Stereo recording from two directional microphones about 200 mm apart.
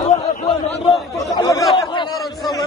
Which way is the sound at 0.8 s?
Centre (ahead or behind).